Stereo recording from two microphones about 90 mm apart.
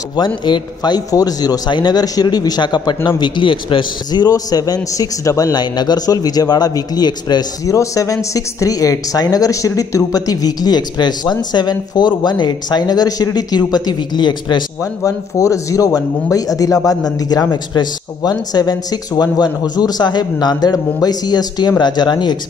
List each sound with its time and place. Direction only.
0.5 s a man's voice: 50° left (ahead or behind)
14.8 s a man's voice: 40° left (ahead or behind); by 22.4 s 55° left (ahead or behind)